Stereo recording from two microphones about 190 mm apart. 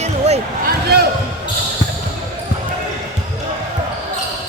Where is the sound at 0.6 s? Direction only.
55° right (ahead or behind).